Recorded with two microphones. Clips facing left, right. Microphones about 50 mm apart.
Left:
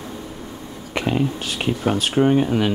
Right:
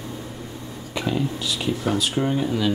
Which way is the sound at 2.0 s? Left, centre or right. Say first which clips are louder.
Left 6 dB; left.